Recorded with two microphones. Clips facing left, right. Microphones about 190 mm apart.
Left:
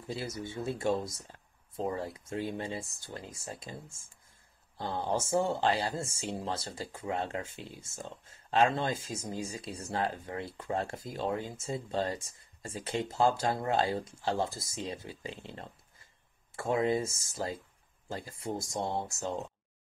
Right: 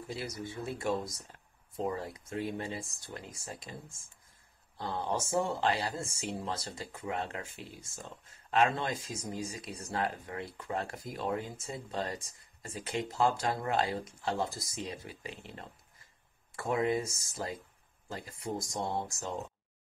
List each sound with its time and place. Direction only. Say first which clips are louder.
0.1 s speech: left 3 dB; 25° left (ahead or behind)
18.8 s speech: left 2 dB; centre (ahead or behind)
19.0 s speech: left 3 dB; 25° left (ahead or behind)